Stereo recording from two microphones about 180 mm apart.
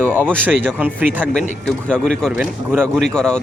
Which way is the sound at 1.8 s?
5° left (ahead or behind).